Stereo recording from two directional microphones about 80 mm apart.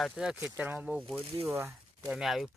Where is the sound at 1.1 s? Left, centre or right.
Right.